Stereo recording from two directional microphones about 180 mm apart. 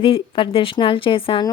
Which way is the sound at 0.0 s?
30° left (ahead or behind).